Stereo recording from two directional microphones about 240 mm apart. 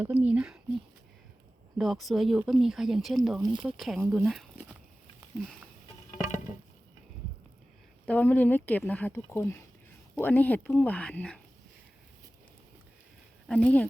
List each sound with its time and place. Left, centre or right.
0.0 s speech: centre
1.8 s speech: centre
3.4 s speech: right
3.8 s speech: centre
4.1 s a sound: centre
6.5 s a sound: centre
8.0 s speech: centre
13.5 s speech: centre